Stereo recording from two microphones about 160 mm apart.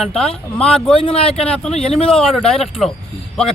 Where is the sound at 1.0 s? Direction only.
35° left (ahead or behind).